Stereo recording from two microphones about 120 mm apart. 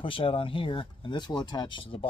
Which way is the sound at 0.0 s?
45° left (ahead or behind).